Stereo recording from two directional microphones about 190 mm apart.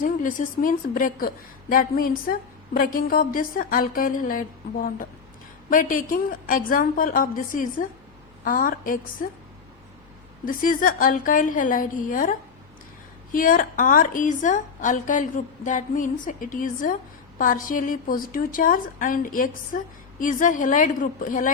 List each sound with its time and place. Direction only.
0.0 s a woman's voice: 45° left (ahead or behind)
10.4 s a woman's voice: 45° left (ahead or behind)